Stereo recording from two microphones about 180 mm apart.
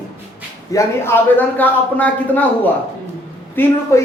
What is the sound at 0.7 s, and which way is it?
A man's voice, 15° left (ahead or behind).